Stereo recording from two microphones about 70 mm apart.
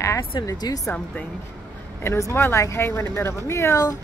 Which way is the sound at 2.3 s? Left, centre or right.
Left.